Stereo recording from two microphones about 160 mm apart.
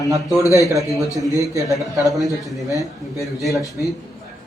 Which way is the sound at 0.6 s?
20° right (ahead or behind).